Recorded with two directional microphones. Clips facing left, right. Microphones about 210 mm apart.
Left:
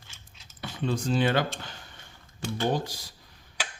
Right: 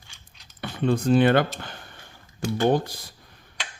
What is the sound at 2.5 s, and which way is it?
Speech, 55° right (ahead or behind).